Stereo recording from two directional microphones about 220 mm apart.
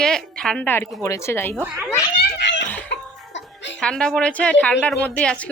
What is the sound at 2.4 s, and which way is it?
Giggle, 55° left (ahead or behind).